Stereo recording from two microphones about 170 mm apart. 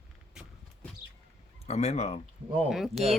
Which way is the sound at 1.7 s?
40° left (ahead or behind).